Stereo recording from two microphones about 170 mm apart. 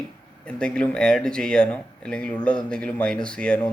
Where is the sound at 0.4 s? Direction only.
5° left (ahead or behind).